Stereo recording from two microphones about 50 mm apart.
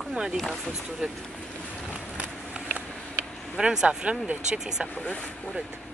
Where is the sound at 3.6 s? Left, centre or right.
Centre.